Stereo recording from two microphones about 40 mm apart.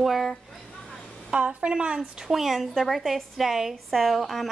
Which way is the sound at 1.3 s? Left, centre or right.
Right.